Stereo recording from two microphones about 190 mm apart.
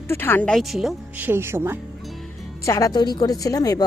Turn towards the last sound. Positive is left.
turn(degrees=20)  # may be behind; listen again after turning